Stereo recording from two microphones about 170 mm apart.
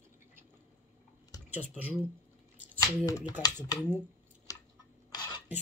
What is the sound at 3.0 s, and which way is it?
Speech, 20° left (ahead or behind).